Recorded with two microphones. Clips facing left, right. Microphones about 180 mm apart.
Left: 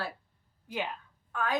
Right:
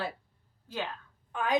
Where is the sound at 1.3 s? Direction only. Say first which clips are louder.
Right 3 dB; 20° right (ahead or behind).